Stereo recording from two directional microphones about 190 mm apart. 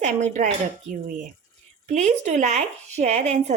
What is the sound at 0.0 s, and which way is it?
A woman's voice, 40° right (ahead or behind).